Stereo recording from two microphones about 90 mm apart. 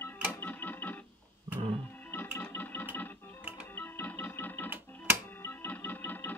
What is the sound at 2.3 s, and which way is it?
Music, 20° left (ahead or behind).